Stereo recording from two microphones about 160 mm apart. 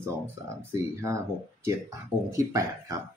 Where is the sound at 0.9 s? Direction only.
20° right (ahead or behind).